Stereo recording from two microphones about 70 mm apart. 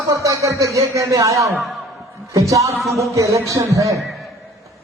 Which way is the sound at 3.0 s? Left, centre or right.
Right.